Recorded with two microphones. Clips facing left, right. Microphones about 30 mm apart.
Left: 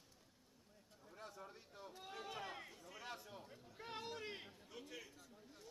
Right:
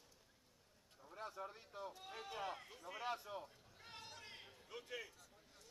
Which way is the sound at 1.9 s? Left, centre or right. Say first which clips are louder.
Even; centre.